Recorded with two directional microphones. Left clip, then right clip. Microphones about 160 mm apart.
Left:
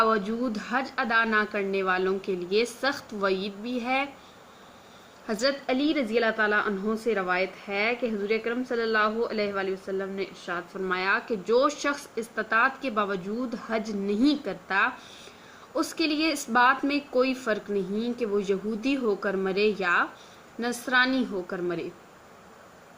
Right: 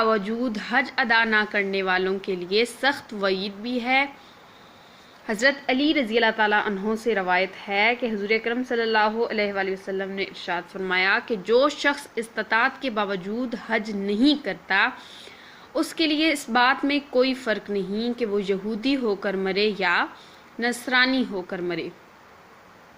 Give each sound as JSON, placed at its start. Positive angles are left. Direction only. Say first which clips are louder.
{"t": 0.0, "sound": "a woman's voice", "louder": "right 2 dB", "side_deg": -15}
{"t": 5.2, "sound": "a woman's voice", "louder": "right 5 dB", "side_deg": -20}